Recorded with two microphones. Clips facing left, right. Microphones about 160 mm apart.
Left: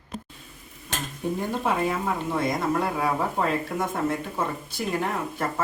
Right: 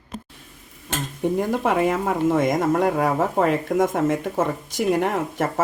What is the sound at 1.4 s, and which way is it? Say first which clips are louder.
Speech: right 5 dB; 80° right.